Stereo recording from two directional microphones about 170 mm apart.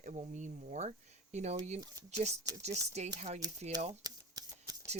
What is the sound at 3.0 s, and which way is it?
Speech, 40° right (ahead or behind).